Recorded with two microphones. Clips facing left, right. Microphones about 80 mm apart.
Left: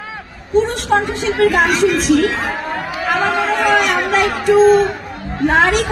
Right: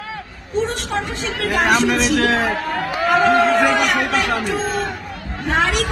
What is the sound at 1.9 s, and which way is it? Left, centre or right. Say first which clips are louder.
Speech: left 3 dB; right.